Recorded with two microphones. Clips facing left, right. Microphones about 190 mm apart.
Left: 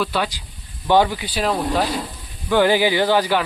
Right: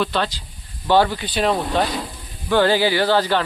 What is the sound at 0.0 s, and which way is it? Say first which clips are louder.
Speech: right 1 dB; 10° left (ahead or behind).